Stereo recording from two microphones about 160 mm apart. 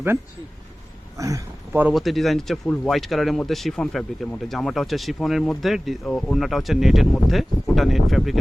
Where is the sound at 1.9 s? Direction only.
Centre (ahead or behind).